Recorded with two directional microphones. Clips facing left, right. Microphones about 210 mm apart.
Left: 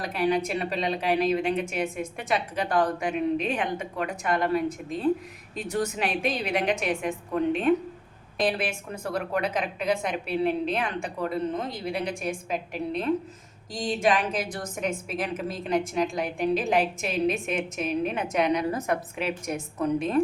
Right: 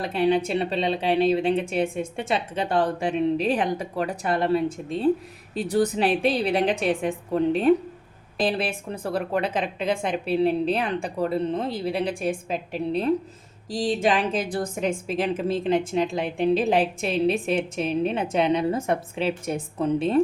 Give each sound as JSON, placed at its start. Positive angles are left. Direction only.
{"t": 0.0, "sound": "a woman's voice", "side_deg": -25}